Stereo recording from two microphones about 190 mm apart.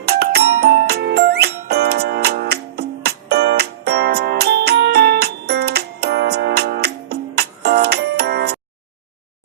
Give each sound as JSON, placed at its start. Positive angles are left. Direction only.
{"t": 0.0, "sound": "music", "side_deg": -60}